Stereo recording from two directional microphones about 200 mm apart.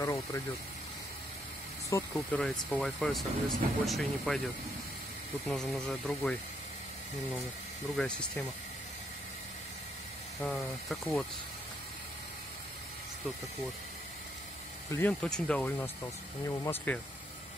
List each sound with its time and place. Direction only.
0.0 s speech: 15° left (ahead or behind)
1.9 s speech: 15° left (ahead or behind)
2.4 s speech: 5° left (ahead or behind)
5.5 s speech: 5° left (ahead or behind)
7.9 s speech: 5° left (ahead or behind)
10.4 s speech: 5° left (ahead or behind)
14.9 s speech: 15° left (ahead or behind)